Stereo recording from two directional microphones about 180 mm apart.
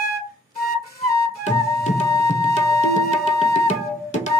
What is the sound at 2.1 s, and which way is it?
Music, 20° left (ahead or behind).